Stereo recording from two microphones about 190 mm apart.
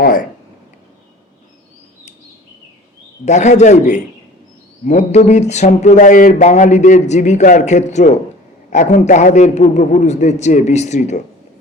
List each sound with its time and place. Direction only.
0.0 s speech: 45° left (ahead or behind)
3.2 s speech: 40° left (ahead or behind)